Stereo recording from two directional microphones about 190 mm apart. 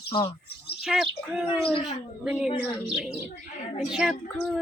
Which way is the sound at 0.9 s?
Centre (ahead or behind).